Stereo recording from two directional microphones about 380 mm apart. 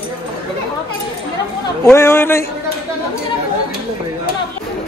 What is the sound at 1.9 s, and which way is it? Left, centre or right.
Speech, centre.